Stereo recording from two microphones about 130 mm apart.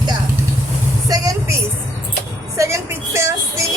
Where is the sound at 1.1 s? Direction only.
25° right (ahead or behind).